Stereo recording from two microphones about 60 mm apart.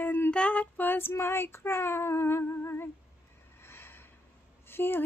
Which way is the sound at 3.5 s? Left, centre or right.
Left.